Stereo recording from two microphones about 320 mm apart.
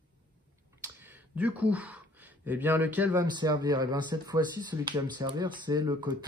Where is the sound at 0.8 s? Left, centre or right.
Centre.